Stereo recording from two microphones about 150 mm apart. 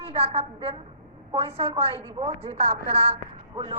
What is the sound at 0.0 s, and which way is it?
A woman's voice, 40° right (ahead or behind).